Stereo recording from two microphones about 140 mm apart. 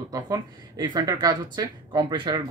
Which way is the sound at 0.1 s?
25° right (ahead or behind).